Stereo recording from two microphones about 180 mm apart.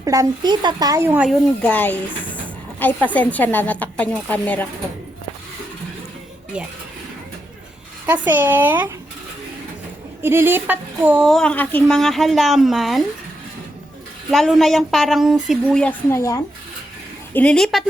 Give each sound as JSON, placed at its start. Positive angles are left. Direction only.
{"t": 0.0, "sound": "speech", "side_deg": -20}
{"t": 1.3, "sound": "a woman's voice", "side_deg": 5}
{"t": 8.0, "sound": "speech", "side_deg": -10}
{"t": 10.2, "sound": "speech", "side_deg": -15}
{"t": 14.3, "sound": "speech", "side_deg": 0}